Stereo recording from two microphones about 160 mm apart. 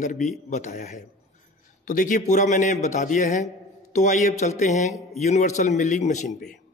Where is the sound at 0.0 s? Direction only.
50° left (ahead or behind).